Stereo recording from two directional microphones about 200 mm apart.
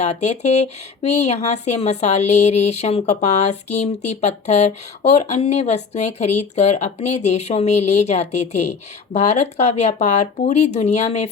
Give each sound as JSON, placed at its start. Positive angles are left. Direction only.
{"t": 0.0, "sound": "speech", "side_deg": 35}